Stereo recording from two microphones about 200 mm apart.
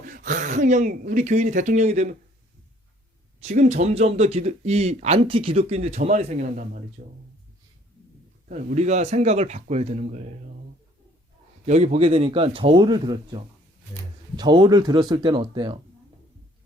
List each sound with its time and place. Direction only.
0.0 s speech: 45° right (ahead or behind)
3.4 s speech: 35° right (ahead or behind)
8.4 s speech: 35° right (ahead or behind)
11.6 s a man's voice: 35° right (ahead or behind)